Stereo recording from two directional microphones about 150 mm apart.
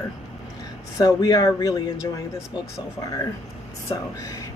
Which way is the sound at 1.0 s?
25° left (ahead or behind).